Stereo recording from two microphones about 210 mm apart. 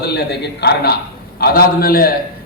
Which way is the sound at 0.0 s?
50° left (ahead or behind).